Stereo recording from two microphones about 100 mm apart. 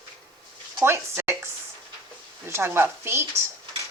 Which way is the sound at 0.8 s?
25° right (ahead or behind).